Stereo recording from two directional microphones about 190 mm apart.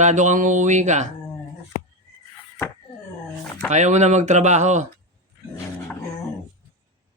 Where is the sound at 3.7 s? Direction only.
40° right (ahead or behind).